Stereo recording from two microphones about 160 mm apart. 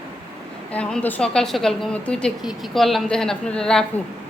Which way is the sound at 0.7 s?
5° left (ahead or behind).